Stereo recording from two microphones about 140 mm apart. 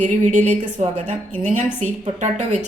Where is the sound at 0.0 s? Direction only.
60° right (ahead or behind).